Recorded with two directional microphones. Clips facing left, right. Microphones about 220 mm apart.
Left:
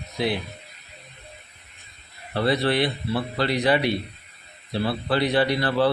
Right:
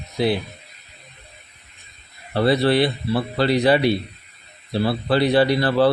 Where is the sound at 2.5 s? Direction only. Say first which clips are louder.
Right 5 dB; 35° right (ahead or behind).